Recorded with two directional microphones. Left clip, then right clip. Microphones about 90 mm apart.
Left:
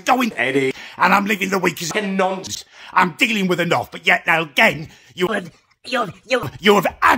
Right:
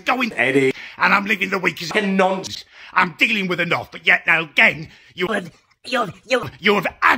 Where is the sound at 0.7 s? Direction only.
35° left (ahead or behind).